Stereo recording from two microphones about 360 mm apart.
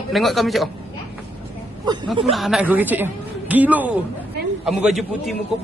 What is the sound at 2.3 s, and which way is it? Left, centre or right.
Speech, centre.